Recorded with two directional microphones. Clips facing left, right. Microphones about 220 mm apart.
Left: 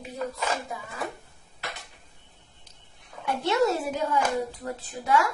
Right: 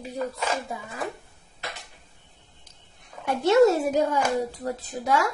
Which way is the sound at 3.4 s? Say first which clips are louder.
Right 7 dB; 45° right (ahead or behind).